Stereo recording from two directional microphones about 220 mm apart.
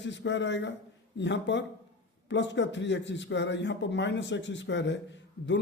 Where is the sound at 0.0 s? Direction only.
55° left (ahead or behind).